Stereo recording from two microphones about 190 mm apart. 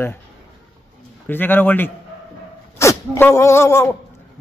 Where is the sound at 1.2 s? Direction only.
10° left (ahead or behind).